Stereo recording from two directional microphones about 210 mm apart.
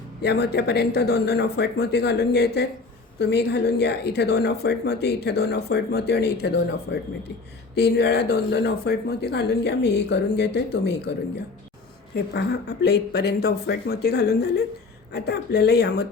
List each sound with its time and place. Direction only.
0.2 s speech: 55° left (ahead or behind)
12.1 s speech: 55° left (ahead or behind)